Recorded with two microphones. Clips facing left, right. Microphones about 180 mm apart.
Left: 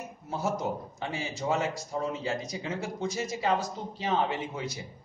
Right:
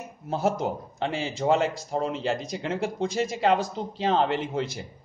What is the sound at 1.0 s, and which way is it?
Speech, 85° right.